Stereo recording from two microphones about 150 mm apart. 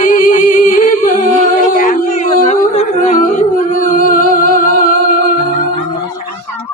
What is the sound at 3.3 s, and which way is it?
Humming, 65° left (ahead or behind).